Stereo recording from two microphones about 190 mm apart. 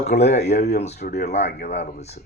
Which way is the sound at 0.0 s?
35° left (ahead or behind).